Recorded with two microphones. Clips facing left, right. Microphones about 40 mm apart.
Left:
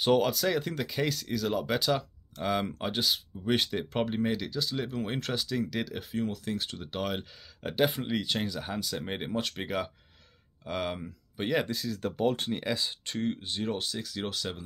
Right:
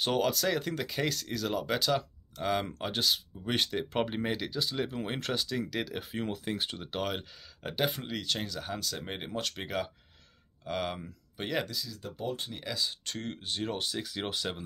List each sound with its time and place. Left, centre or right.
0.0 s speech: centre
4.1 s speech: centre
6.4 s speech: centre
11.8 s speech: left
12.5 s speech: left
13.1 s speech: centre
13.9 s speech: centre